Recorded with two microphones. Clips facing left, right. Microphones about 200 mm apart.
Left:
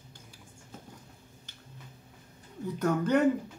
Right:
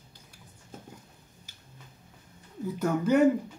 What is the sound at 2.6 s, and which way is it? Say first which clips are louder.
Speech: right 1 dB; 5° right (ahead or behind).